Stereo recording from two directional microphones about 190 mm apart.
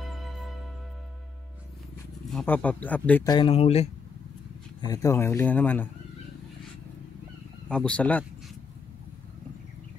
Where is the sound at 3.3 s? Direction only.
25° left (ahead or behind).